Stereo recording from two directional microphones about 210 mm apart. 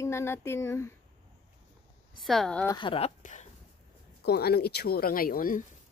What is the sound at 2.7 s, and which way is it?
Speech, 25° left (ahead or behind).